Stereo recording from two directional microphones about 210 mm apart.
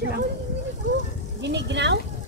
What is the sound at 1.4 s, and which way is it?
Speech, 55° right (ahead or behind).